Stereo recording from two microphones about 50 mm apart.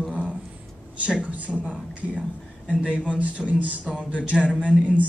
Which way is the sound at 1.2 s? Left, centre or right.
Right.